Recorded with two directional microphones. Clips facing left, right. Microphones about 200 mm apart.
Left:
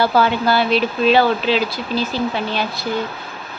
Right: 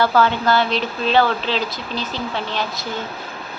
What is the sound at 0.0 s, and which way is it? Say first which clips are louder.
Speech: left 1 dB; 10° left (ahead or behind).